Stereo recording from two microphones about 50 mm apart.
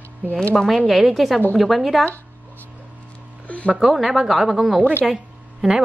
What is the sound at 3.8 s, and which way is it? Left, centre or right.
A woman's voice, centre.